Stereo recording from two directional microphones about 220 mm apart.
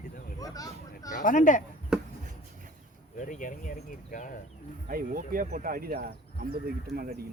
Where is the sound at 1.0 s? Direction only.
35° left (ahead or behind).